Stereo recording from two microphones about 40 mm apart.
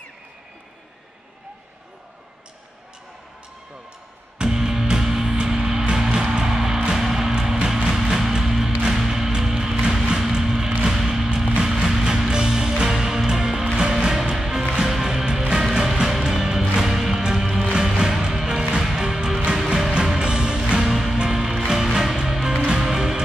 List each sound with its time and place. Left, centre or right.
4.4 s music: centre